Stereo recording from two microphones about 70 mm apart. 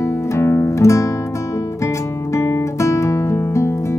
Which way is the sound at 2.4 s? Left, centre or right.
Left.